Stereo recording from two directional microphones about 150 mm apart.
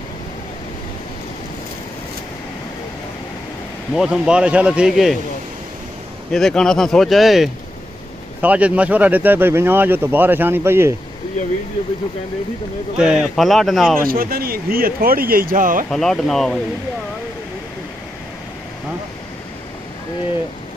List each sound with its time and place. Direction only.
3.9 s speech: 5° right (ahead or behind)
6.3 s speech: 5° left (ahead or behind); by 11.0 s 15° right (ahead or behind)
12.9 s speech: 5° right (ahead or behind)
14.0 s speech: 75° right (ahead or behind)
15.9 s speech: 5° left (ahead or behind)